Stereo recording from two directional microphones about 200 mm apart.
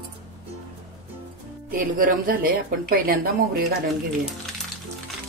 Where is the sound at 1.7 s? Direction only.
45° right (ahead or behind).